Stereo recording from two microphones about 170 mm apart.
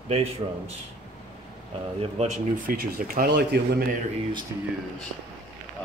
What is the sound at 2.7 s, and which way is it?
Speech, 55° right (ahead or behind).